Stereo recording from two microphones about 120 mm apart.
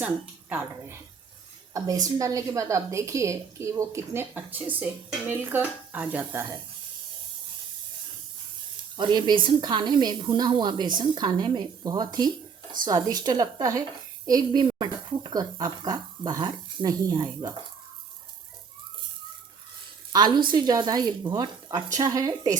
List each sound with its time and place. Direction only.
0.5 s a woman's voice: 15° right (ahead or behind)
2.0 s a woman's voice: 25° right (ahead or behind)
9.0 s a woman's voice: 40° right (ahead or behind)
20.1 s a woman's voice: 35° right (ahead or behind)